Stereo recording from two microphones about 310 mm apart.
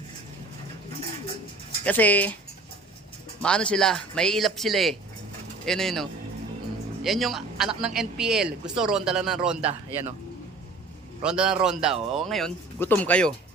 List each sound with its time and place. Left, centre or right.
1.8 s speech: centre
3.4 s speech: centre
9.6 s speech: centre
11.2 s speech: centre